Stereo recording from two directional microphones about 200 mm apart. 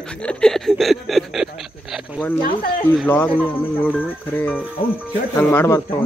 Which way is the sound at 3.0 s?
10° left (ahead or behind).